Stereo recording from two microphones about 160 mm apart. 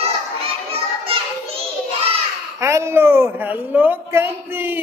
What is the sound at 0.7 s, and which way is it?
Children playing, 35° right (ahead or behind).